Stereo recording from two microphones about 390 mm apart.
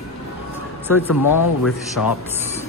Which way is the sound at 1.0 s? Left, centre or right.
Left.